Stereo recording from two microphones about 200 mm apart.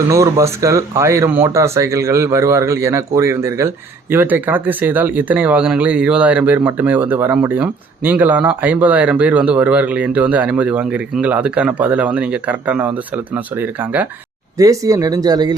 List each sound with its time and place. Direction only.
0.1 s speech: 15° right (ahead or behind)